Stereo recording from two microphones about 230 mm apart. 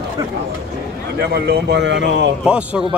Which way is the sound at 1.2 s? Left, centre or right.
Right.